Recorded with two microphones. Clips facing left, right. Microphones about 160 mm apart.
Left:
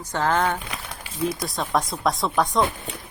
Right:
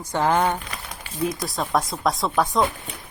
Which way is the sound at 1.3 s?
Centre (ahead or behind).